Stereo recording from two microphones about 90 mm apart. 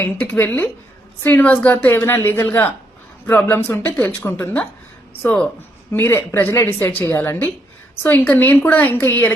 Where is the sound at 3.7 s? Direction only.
20° left (ahead or behind).